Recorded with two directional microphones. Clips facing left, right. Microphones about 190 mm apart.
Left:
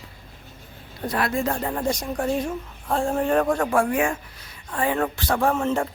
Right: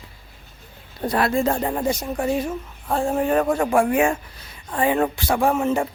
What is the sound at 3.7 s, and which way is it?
Speech, 20° right (ahead or behind).